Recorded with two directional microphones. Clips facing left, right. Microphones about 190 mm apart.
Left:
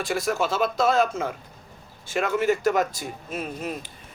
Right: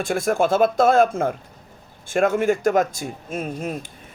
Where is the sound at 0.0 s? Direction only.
50° right (ahead or behind).